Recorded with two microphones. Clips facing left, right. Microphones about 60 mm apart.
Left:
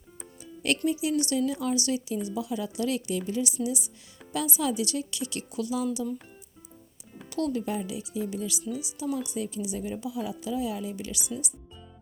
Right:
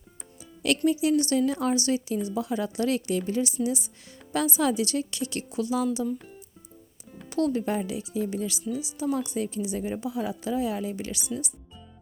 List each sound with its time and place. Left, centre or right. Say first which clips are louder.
1.0 s speech: right 3 dB; right
5.5 s a woman's voice: right 3 dB; right
7.3 s speech: right 3 dB; right
8.7 s a woman's voice: right 3 dB; centre
9.0 s a woman's voice: right 3 dB; right